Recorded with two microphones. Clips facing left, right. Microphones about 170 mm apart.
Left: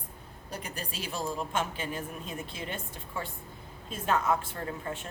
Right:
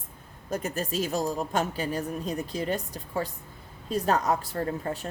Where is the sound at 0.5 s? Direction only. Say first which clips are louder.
Right 10 dB; 45° right (ahead or behind).